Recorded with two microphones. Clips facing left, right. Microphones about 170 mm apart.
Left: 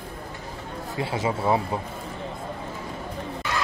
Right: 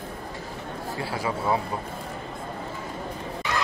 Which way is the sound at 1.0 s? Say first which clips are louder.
Left 4 dB; 20° left (ahead or behind).